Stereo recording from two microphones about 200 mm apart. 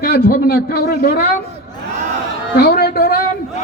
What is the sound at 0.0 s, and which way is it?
Speech, 50° left (ahead or behind).